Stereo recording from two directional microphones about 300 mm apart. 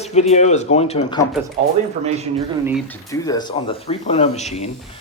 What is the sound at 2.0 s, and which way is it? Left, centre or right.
Speech, right.